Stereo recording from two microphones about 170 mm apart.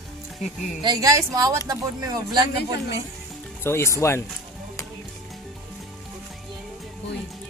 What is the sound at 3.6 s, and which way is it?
Speech, 15° left (ahead or behind).